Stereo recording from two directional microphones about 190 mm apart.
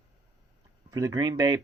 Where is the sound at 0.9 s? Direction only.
20° right (ahead or behind).